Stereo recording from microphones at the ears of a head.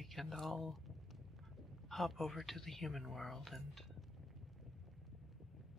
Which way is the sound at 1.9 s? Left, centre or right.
Centre.